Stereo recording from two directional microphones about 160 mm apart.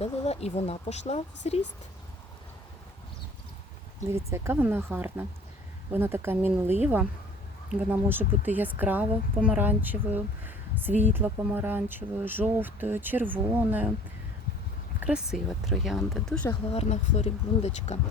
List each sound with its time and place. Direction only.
0.0 s speech: 40° left (ahead or behind)
4.1 s a woman's voice: 15° right (ahead or behind)
15.0 s speech: 5° right (ahead or behind)
16.7 s speech: 45° left (ahead or behind)